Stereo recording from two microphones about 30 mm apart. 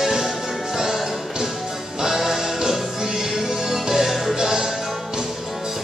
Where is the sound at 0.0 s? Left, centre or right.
Centre.